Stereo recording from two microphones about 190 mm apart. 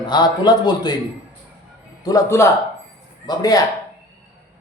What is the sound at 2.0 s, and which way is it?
Speech, 15° left (ahead or behind).